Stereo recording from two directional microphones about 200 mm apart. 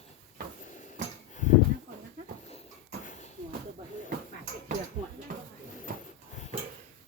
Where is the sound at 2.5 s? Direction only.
35° left (ahead or behind).